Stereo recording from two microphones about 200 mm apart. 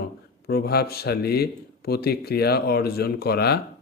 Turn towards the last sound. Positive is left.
turn(degrees=50)  # may be behind; listen again after turning